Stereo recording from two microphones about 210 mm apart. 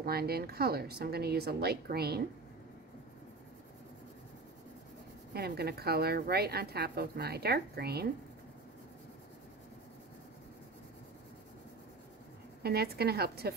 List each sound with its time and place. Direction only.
0.0 s a woman's voice: 45° right (ahead or behind)
5.3 s a woman's voice: 50° right (ahead or behind)
12.6 s a woman's voice: 50° right (ahead or behind)